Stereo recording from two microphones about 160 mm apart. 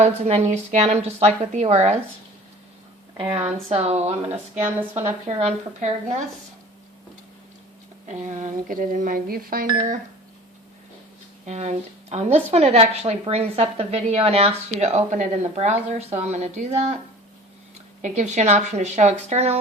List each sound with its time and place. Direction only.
0.0 s speech: 40° right (ahead or behind)
3.2 s speech: 40° right (ahead or behind)
8.0 s speech: 50° right (ahead or behind)
11.4 s speech: 45° right (ahead or behind)
18.0 s speech: 45° right (ahead or behind)